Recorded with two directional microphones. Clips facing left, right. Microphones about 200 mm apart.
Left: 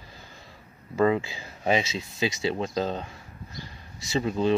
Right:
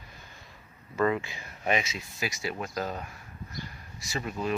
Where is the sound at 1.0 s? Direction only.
25° left (ahead or behind).